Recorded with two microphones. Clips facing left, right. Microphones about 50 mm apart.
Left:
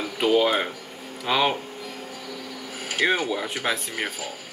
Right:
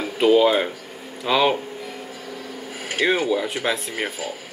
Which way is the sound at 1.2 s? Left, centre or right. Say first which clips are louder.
Right 3 dB; centre.